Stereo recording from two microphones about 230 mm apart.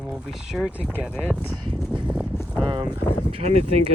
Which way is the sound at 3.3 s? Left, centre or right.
Right.